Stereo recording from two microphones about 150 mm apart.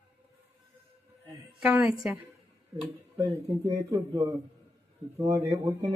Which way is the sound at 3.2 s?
20° right (ahead or behind).